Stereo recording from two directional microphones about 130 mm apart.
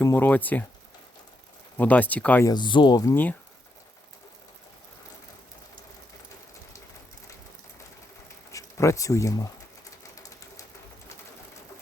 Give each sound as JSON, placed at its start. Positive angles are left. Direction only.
{"t": 0.0, "sound": "speech", "side_deg": 15}
{"t": 1.8, "sound": "speech", "side_deg": 10}
{"t": 2.4, "sound": "speech", "side_deg": 35}
{"t": 8.5, "sound": "speech", "side_deg": 25}
{"t": 10.0, "sound": "a sound", "side_deg": 25}